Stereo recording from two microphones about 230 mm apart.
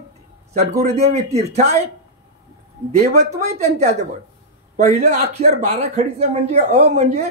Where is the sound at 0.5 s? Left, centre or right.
Right.